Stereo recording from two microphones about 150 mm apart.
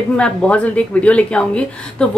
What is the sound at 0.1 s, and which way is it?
A woman's voice, 5° left (ahead or behind).